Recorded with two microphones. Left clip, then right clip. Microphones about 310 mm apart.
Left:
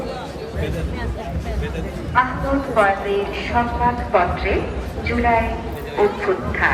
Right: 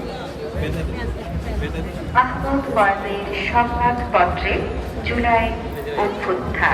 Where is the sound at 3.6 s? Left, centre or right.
Right.